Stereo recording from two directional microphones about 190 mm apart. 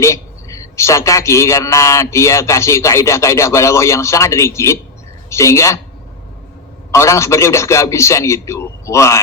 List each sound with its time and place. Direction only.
0.0 s a man's voice: 15° left (ahead or behind)
6.9 s a man's voice: 15° left (ahead or behind)